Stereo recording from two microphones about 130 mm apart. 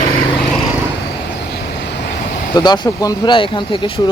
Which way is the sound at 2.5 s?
30° left (ahead or behind).